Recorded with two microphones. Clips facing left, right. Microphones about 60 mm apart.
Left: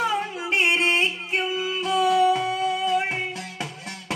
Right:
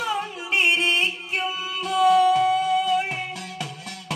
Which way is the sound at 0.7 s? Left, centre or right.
Left.